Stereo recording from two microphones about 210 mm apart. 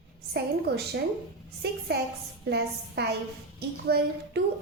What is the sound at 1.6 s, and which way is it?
A woman's voice, 50° right (ahead or behind).